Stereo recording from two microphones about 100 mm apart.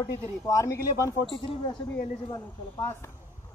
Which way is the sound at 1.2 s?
60° left (ahead or behind).